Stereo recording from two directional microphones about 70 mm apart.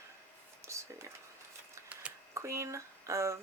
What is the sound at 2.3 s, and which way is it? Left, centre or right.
Speech, right.